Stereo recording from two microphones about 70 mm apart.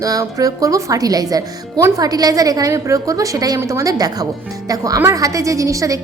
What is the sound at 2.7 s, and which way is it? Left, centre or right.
A woman's voice, right.